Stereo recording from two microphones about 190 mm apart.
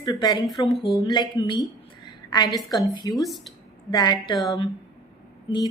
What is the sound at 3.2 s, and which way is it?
Speech, centre (ahead or behind).